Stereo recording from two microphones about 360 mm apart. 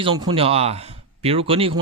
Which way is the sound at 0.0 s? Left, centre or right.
Centre.